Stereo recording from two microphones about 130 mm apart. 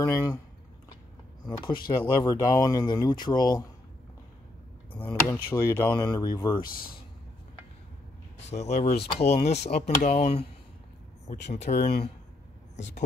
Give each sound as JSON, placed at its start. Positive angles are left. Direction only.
{"t": 0.0, "sound": "speech", "side_deg": 25}
{"t": 1.6, "sound": "speech", "side_deg": 35}
{"t": 4.9, "sound": "speech", "side_deg": 15}
{"t": 5.5, "sound": "speech", "side_deg": 30}
{"t": 6.6, "sound": "speech", "side_deg": 90}
{"t": 8.5, "sound": "speech", "side_deg": 60}